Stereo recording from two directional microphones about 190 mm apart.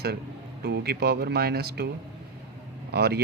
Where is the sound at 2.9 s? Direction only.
60° right (ahead or behind).